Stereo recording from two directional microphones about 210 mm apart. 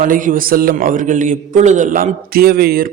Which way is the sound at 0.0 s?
40° right (ahead or behind).